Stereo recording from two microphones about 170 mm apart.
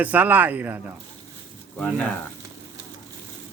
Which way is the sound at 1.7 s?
5° left (ahead or behind).